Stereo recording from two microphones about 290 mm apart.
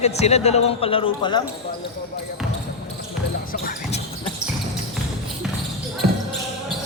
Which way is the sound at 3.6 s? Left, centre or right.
Left.